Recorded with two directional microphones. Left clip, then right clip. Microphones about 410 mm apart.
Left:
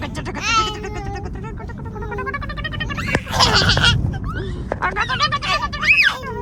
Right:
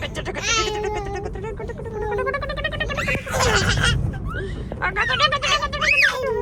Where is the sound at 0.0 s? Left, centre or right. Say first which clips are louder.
Left 1 dB; centre.